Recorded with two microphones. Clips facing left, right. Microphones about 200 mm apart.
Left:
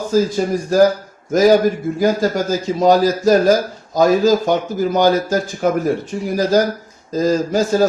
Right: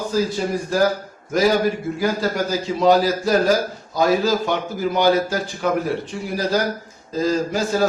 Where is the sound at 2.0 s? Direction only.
45° left (ahead or behind).